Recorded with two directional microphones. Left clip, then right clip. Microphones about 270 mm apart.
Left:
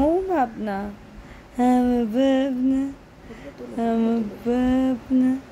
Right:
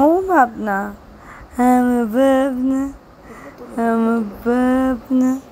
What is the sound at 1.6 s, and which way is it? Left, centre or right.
Female singing, centre.